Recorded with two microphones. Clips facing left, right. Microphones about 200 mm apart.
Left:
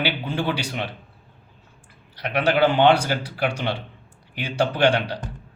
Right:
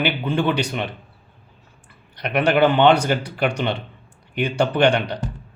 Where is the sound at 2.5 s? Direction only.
60° right (ahead or behind).